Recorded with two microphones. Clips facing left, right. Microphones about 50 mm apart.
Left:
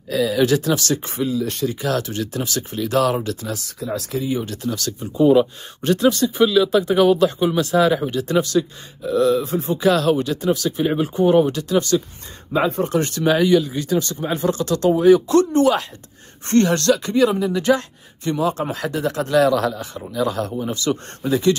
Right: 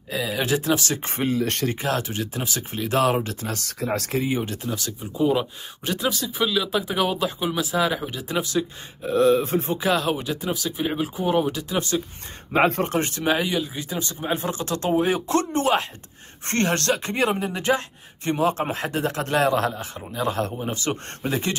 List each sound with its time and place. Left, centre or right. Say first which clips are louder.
0.1 s speech: left 7 dB; centre
1.0 s speech: left 1 dB; right
1.8 s speech: left 3 dB; right
3.3 s speech: left 4 dB; right
3.5 s speech: even; right
4.2 s speech: left 2 dB; right
5.1 s speech: left 8 dB; centre
9.0 s speech: left 1 dB; right
9.8 s speech: left 6 dB; centre
12.5 s speech: even; right
12.9 s speech: left 4 dB; right
13.2 s speech: left 10 dB; centre
14.4 s speech: left 7 dB; right